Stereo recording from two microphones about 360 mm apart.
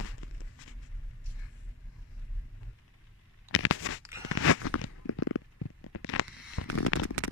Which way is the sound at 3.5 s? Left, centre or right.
Left.